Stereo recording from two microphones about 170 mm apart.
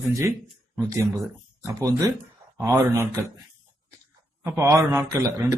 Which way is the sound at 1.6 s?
20° right (ahead or behind).